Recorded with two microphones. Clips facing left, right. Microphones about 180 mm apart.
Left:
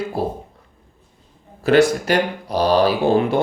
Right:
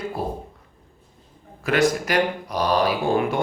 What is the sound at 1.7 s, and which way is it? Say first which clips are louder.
Speech: left 6 dB; 30° left (ahead or behind).